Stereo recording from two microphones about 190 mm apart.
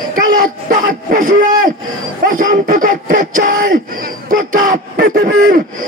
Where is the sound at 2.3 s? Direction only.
45° right (ahead or behind).